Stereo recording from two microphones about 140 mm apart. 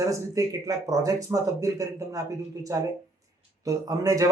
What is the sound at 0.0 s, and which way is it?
A man's voice, 25° right (ahead or behind).